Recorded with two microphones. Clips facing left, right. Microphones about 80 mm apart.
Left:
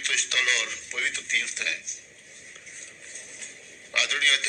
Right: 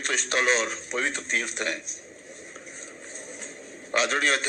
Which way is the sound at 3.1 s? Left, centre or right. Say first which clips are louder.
Right 7 dB; right.